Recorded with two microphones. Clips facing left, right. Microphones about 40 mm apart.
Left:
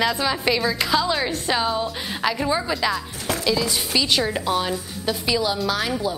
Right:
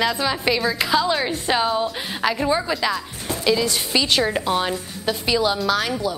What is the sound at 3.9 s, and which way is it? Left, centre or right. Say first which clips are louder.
A woman's voice: right 2 dB; centre.